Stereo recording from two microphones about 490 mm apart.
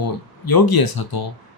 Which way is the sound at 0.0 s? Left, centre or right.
Left.